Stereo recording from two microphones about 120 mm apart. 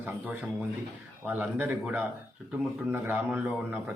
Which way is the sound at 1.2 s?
15° right (ahead or behind).